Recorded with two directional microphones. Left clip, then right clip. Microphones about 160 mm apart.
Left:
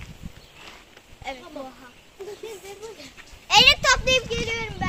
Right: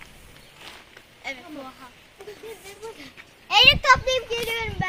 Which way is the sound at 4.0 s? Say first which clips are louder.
Left 3 dB; 20° right (ahead or behind).